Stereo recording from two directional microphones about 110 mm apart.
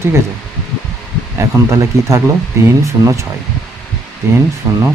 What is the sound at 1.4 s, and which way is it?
Speech, 30° right (ahead or behind).